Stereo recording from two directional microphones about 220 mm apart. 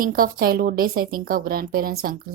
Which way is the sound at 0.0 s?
40° right (ahead or behind).